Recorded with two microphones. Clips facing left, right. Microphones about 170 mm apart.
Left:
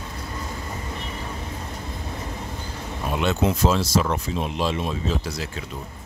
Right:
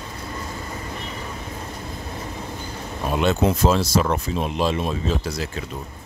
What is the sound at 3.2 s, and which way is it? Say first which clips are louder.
Speech: right 2 dB; 40° right (ahead or behind).